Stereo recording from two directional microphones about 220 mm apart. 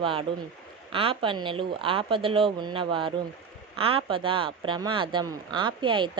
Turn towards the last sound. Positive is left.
turn(degrees=-20)  # may be behind; listen again after turning